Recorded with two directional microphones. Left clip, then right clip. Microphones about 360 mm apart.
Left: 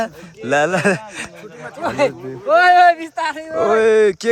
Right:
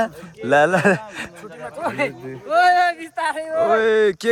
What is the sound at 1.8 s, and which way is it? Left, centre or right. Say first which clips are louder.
Speech: left 6 dB; centre.